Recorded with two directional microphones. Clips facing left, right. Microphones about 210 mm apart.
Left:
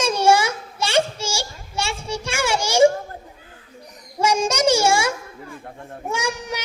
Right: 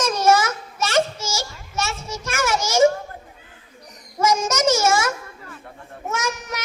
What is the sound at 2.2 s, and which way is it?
Children playing, 15° left (ahead or behind).